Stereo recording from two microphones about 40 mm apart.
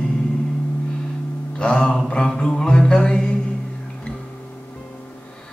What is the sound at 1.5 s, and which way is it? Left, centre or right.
Mantra, centre.